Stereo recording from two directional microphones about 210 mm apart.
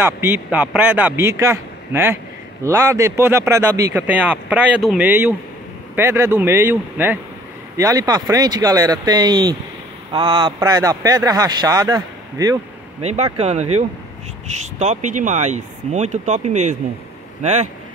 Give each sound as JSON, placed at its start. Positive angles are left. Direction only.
{"t": 0.0, "sound": "speech", "side_deg": -10}
{"t": 13.0, "sound": "speech", "side_deg": -30}